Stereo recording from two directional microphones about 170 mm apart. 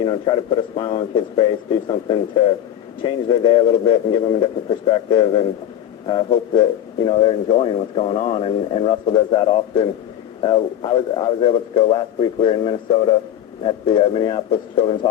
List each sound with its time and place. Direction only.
0.0 s a man's voice: 30° left (ahead or behind)